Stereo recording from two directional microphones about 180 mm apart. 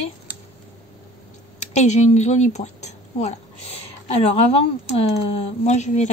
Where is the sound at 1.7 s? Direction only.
40° left (ahead or behind).